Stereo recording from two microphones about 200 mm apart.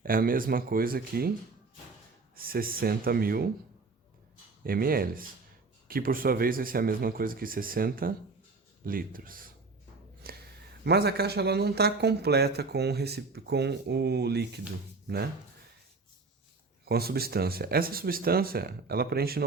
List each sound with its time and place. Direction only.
0.0 s speech: 45° right (ahead or behind)
2.3 s speech: 45° right (ahead or behind)
4.6 s speech: 45° right (ahead or behind)
10.3 s a sound: 50° right (ahead or behind)
10.8 s speech: 55° right (ahead or behind)
16.8 s speech: 50° right (ahead or behind)